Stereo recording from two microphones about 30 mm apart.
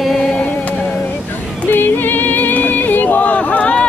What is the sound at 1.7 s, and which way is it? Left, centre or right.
Music, left.